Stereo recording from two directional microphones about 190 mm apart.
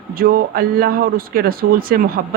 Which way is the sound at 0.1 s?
50° right (ahead or behind).